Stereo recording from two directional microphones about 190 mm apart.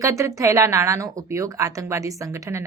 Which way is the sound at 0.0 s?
15° right (ahead or behind).